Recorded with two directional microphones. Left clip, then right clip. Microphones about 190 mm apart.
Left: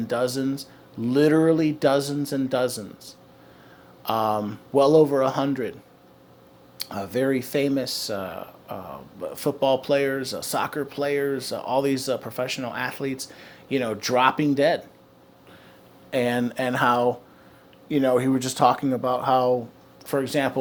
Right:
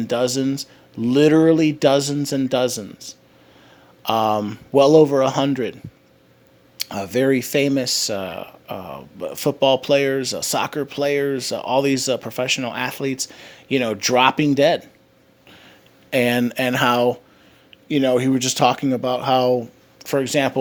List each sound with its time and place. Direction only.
0.0 s speech: 40° right (ahead or behind)
16.0 s speech: 40° right (ahead or behind)